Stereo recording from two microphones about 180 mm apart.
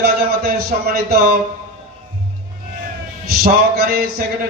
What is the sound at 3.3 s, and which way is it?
Speech, 55° right (ahead or behind).